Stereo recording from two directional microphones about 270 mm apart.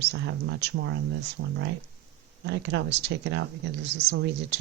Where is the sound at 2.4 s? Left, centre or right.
Right.